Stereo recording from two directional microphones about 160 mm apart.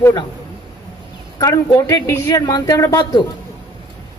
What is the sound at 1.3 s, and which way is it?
A man's voice, 20° left (ahead or behind).